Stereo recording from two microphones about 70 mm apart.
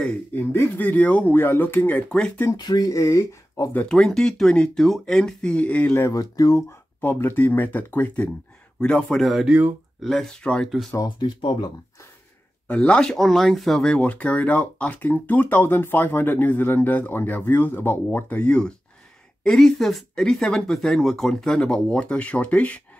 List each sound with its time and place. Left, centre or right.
0.3 s speech: left
2.0 s speech: centre
2.5 s speech: left
3.9 s speech: centre
5.9 s speech: left
6.3 s speech: left
6.7 s speech: left
8.8 s speech: centre
9.2 s speech: centre
12.6 s speech: centre
18.4 s speech: centre